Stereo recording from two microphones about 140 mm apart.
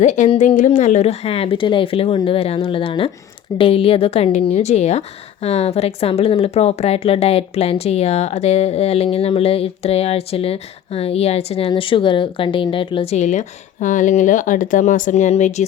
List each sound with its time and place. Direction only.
0.0 s a woman's voice: 60° left (ahead or behind); by 13.1 s 40° left (ahead or behind)
13.1 s speech: 55° left (ahead or behind)